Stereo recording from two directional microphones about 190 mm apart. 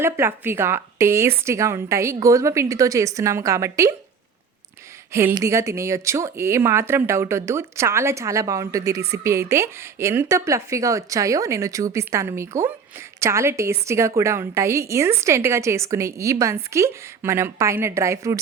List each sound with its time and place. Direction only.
0.0 s speech: 10° right (ahead or behind)
5.1 s speech: 15° right (ahead or behind)